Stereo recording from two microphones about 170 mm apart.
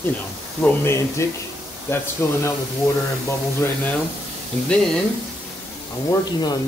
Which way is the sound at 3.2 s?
10° left (ahead or behind).